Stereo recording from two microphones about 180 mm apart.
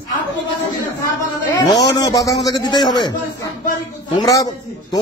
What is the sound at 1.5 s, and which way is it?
A man's voice, 20° left (ahead or behind).